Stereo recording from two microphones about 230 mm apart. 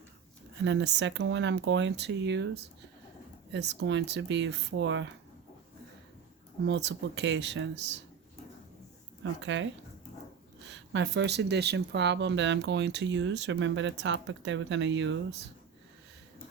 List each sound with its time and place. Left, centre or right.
0.6 s speech: right
3.5 s speech: right
6.7 s speech: right
9.4 s speech: right
10.7 s speech: right